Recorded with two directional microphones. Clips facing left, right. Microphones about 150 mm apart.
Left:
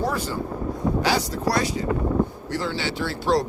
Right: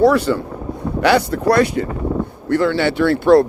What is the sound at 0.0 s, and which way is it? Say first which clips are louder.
Speech: right 13 dB; 70° right (ahead or behind).